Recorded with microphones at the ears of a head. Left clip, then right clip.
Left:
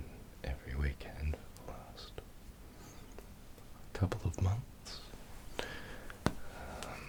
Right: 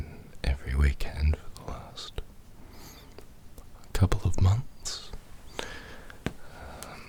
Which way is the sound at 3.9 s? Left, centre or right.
Right.